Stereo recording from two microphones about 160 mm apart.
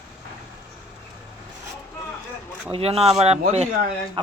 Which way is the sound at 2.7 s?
40° right (ahead or behind).